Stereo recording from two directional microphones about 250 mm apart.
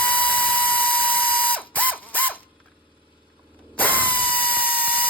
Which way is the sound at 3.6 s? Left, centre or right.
Centre.